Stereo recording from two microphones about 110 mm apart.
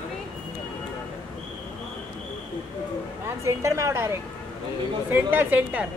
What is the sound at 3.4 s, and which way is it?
A woman's voice, 30° right (ahead or behind).